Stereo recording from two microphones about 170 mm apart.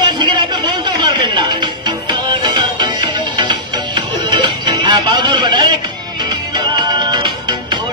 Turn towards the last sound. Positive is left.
turn(degrees=-25)  # may be behind; listen again after turning